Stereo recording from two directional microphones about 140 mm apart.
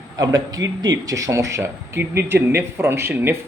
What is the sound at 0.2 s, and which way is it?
A man's voice, 25° right (ahead or behind).